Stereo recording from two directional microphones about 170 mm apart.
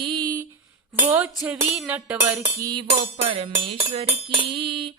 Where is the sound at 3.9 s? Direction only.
35° right (ahead or behind).